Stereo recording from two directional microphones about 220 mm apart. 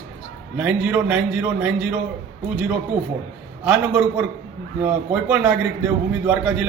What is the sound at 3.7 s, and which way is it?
A man's voice, 10° right (ahead or behind).